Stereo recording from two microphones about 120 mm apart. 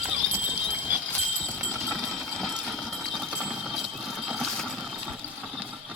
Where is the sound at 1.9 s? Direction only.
Centre (ahead or behind).